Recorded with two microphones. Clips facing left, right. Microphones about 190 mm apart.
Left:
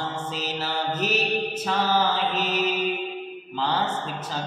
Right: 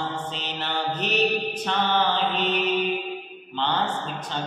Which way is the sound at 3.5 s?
5° left (ahead or behind).